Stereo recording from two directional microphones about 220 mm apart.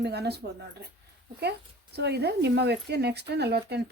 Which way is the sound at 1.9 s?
50° right (ahead or behind).